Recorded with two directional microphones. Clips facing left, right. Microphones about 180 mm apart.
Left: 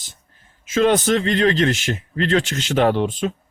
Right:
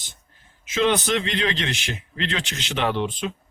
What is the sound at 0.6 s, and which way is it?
A man's voice, 45° left (ahead or behind).